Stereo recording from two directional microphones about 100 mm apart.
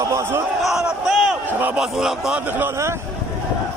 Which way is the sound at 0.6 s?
5° right (ahead or behind).